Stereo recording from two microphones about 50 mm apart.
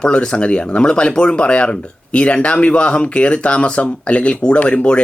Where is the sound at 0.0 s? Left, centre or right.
Centre.